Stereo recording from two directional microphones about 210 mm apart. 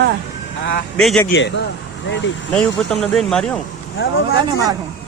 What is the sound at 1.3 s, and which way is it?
Speech, 60° left (ahead or behind).